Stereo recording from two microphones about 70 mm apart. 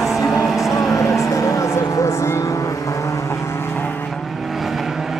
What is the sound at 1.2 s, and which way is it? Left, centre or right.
Vehicle, left.